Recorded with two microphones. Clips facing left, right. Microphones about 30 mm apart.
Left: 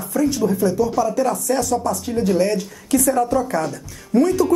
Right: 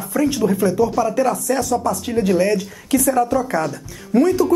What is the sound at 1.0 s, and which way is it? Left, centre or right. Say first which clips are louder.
Speech: right 1 dB; right.